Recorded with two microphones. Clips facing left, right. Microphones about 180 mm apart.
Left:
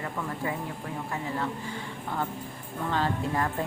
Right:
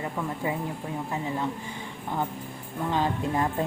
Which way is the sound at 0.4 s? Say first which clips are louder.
Right 3 dB; 20° right (ahead or behind).